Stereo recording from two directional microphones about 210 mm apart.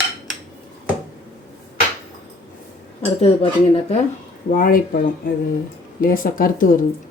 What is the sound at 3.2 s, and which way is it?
Speech, 30° left (ahead or behind).